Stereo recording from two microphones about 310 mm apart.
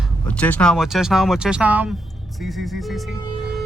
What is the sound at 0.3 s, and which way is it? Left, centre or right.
Speech, centre.